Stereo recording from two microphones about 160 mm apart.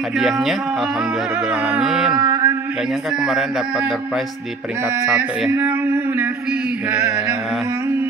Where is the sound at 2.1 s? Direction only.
20° right (ahead or behind).